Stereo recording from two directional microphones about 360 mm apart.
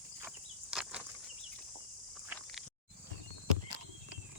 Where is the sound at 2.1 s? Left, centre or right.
Centre.